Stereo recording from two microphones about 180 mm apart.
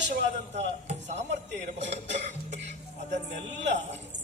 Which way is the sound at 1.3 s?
80° right.